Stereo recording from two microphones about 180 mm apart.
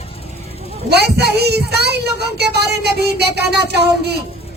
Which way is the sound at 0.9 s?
65° right (ahead or behind).